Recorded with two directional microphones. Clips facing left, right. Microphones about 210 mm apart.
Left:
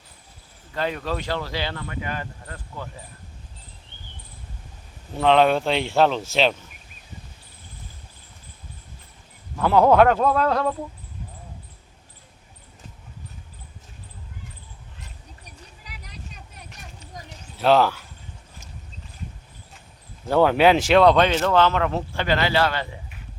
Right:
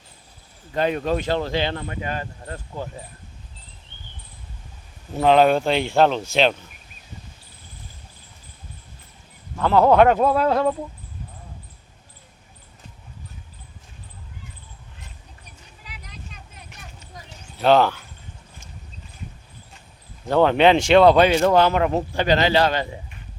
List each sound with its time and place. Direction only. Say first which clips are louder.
0.7 s speech: right 5 dB; 20° right (ahead or behind)
5.1 s speech: right 2 dB; 5° right (ahead or behind)
9.6 s speech: even; 10° left (ahead or behind)
10.2 s speech: right 2 dB; 10° right (ahead or behind)
17.6 s speech: right 1 dB; centre (ahead or behind)
20.2 s speech: right 1 dB; 10° left (ahead or behind); by 23.0 s 20° right (ahead or behind)